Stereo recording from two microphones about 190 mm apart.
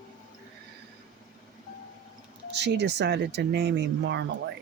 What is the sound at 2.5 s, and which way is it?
Speech, 65° right (ahead or behind).